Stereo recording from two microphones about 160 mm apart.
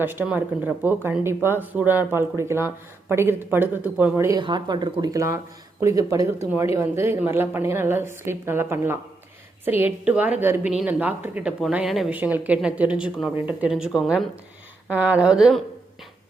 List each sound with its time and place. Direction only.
0.0 s speech: 10° right (ahead or behind)
4.4 s speech: 30° right (ahead or behind); by 15.6 s 5° right (ahead or behind)